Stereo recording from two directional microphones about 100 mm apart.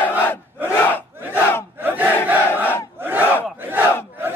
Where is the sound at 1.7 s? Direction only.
20° right (ahead or behind).